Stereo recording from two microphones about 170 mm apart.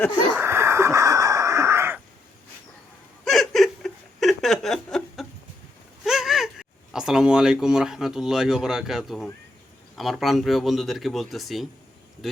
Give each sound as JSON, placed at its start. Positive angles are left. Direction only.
{"t": 0.3, "sound": "wheeze", "side_deg": -15}
{"t": 3.2, "sound": "a sound", "side_deg": 0}
{"t": 6.1, "sound": "speech", "side_deg": 0}